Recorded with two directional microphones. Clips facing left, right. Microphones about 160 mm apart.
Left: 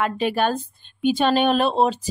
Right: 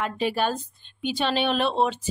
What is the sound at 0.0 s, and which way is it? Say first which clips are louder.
A woman's voice: left 4 dB; 60° left (ahead or behind).